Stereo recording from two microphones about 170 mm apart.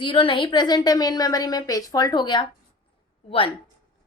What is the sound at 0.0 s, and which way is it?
A woman's voice, 30° left (ahead or behind).